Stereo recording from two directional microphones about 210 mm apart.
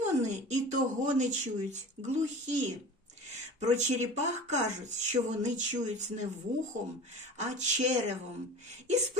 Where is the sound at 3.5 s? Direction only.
35° right (ahead or behind).